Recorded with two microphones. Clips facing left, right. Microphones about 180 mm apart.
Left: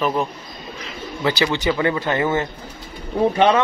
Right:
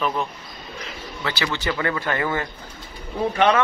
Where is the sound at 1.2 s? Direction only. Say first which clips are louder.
Left 6 dB; 20° left (ahead or behind).